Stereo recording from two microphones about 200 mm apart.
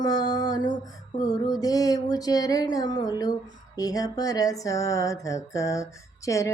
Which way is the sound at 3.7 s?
15° left (ahead or behind).